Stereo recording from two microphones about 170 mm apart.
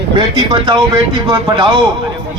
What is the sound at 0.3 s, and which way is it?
Speech, 30° right (ahead or behind).